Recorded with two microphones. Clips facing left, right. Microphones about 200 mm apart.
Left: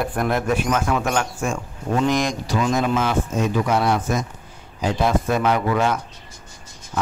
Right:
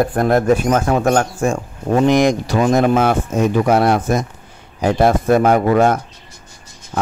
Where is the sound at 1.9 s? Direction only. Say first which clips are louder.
Right 8 dB; 60° right (ahead or behind).